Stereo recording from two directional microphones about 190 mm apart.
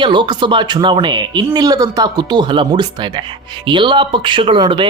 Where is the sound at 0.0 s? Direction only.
25° right (ahead or behind).